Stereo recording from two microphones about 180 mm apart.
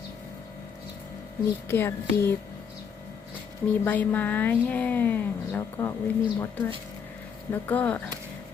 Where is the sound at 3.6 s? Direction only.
10° left (ahead or behind).